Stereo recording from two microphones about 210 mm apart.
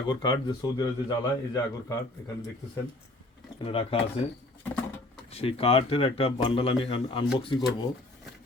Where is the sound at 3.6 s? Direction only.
25° left (ahead or behind).